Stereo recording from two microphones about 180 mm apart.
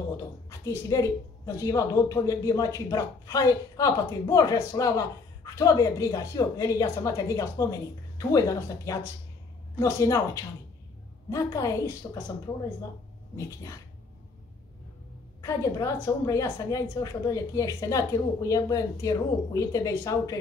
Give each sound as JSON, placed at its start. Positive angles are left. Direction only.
{"t": 0.2, "sound": "a woman's voice", "side_deg": 20}
{"t": 15.4, "sound": "a woman's voice", "side_deg": 15}